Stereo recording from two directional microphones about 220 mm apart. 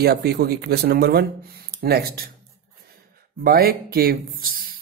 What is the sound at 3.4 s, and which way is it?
Speech, 45° right (ahead or behind).